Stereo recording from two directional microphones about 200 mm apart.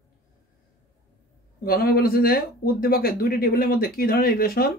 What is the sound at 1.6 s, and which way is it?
Speech, 50° left (ahead or behind).